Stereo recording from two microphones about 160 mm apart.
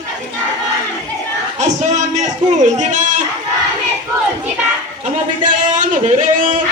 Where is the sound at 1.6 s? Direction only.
50° right (ahead or behind).